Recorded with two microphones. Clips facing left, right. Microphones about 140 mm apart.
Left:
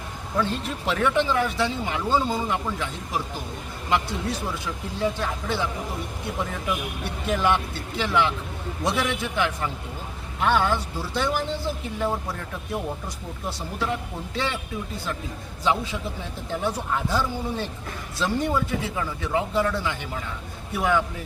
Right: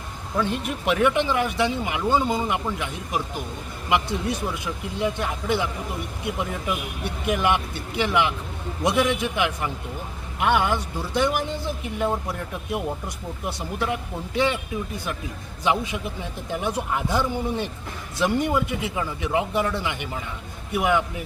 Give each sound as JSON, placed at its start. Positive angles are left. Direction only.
{"t": 0.3, "sound": "speech", "side_deg": -15}
{"t": 7.0, "sound": "speech", "side_deg": -15}
{"t": 14.3, "sound": "speech", "side_deg": -15}
{"t": 15.6, "sound": "speech", "side_deg": -15}